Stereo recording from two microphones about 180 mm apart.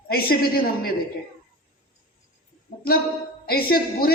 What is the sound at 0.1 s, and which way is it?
Speech, 55° left (ahead or behind).